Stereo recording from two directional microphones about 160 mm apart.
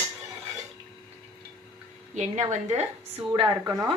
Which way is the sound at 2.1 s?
45° right (ahead or behind).